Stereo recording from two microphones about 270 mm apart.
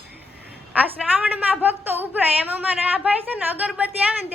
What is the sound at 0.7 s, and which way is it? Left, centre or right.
A woman's voice, centre.